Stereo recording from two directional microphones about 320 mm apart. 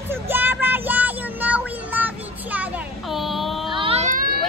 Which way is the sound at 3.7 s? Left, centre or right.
Centre.